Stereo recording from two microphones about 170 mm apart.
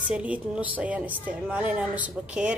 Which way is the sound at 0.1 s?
10° right (ahead or behind).